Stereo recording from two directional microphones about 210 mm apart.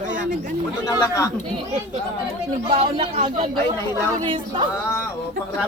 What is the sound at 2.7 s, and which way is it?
Speech, 30° right (ahead or behind).